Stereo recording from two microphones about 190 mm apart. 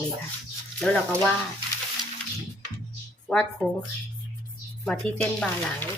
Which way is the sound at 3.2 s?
Centre (ahead or behind).